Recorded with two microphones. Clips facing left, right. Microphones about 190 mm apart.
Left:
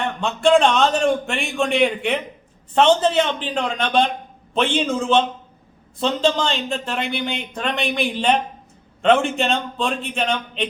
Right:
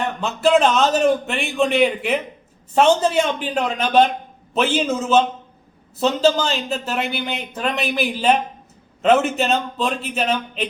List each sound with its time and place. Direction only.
0.2 s a man's voice: 5° right (ahead or behind)